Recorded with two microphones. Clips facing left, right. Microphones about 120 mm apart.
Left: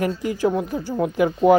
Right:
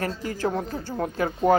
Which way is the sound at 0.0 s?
15° left (ahead or behind).